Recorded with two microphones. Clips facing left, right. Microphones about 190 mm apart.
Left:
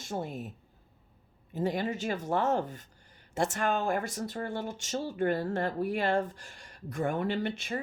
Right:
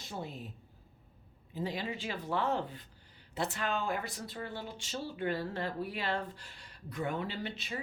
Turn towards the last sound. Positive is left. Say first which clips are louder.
# left 8 dB
turn(degrees=50)  # may be behind; listen again after turning